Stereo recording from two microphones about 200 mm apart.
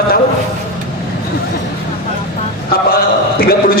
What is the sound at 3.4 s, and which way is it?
Speech, 50° left (ahead or behind).